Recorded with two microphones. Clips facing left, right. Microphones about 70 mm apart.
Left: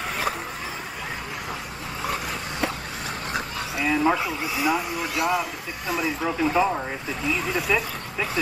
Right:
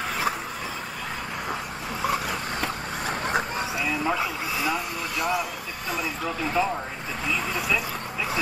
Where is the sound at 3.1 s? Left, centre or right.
Right.